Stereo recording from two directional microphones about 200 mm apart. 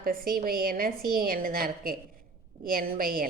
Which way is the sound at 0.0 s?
45° right (ahead or behind).